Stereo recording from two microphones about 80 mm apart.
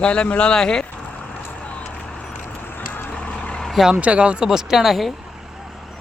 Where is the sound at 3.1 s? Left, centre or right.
Centre.